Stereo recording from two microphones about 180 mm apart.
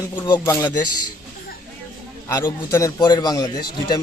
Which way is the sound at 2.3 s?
15° left (ahead or behind).